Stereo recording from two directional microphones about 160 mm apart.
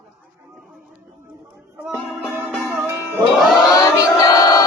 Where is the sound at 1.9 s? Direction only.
5° left (ahead or behind).